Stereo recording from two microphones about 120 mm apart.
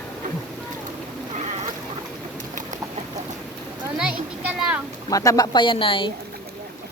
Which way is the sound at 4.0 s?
5° right (ahead or behind).